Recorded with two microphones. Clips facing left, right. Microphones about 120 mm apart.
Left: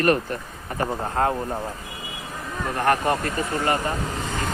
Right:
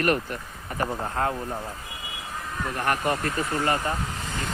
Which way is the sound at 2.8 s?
35° left (ahead or behind).